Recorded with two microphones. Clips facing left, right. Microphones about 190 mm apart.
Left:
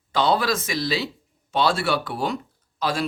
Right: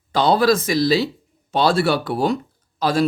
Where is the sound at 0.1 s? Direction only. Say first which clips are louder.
Right 5 dB; 35° right (ahead or behind).